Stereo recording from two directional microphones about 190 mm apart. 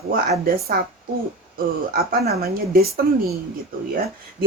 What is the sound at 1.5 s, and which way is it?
A woman's voice, 50° right (ahead or behind).